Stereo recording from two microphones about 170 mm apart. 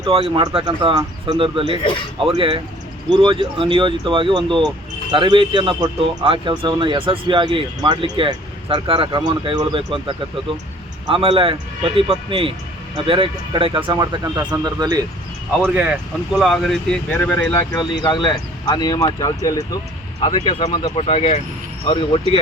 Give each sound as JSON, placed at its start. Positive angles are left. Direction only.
{"t": 0.0, "sound": "speech", "side_deg": -30}
{"t": 1.8, "sound": "speech", "side_deg": 30}
{"t": 2.1, "sound": "a man's voice", "side_deg": -30}
{"t": 15.6, "sound": "speech", "side_deg": -10}
{"t": 16.3, "sound": "speech", "side_deg": 0}
{"t": 17.7, "sound": "speech", "side_deg": 30}
{"t": 20.9, "sound": "speech", "side_deg": 35}